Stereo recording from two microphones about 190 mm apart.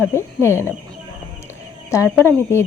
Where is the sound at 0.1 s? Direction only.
15° left (ahead or behind).